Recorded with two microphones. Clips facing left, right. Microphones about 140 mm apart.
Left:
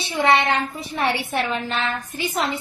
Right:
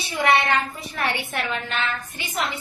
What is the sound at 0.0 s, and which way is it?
A woman's voice, 25° left (ahead or behind).